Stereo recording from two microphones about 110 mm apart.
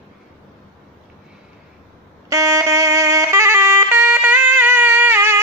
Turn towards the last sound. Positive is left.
turn(degrees=-20)  # may be behind; listen again after turning